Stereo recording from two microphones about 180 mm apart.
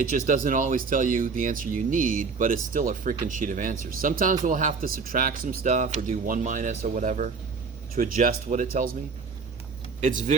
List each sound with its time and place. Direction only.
0.3 s speech: 45° right (ahead or behind)
10.0 s speech: 45° right (ahead or behind)